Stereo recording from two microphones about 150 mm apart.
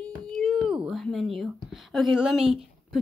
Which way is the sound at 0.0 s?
Centre (ahead or behind).